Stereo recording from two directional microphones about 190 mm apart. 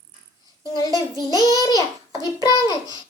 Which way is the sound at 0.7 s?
20° left (ahead or behind).